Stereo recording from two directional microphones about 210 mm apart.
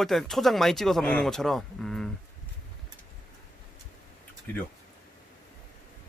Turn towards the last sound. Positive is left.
turn(degrees=10)  # may be behind; listen again after turning